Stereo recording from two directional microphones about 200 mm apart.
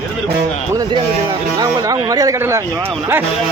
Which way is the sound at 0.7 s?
20° right (ahead or behind).